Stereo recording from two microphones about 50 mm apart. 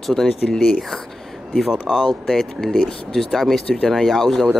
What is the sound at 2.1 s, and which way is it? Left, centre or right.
Speech, centre.